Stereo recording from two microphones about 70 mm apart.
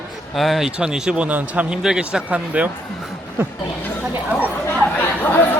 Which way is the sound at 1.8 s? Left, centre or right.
Centre.